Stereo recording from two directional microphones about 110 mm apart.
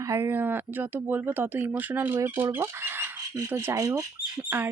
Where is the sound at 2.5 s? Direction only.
20° right (ahead or behind).